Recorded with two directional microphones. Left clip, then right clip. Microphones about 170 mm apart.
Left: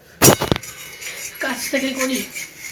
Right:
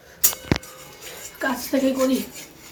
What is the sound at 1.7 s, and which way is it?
Speech, centre (ahead or behind).